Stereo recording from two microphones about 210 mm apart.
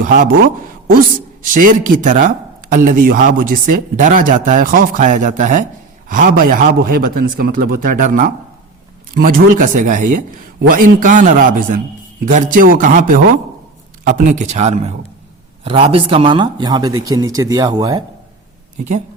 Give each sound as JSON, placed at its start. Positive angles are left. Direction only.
{"t": 0.0, "sound": "a man's voice", "side_deg": -40}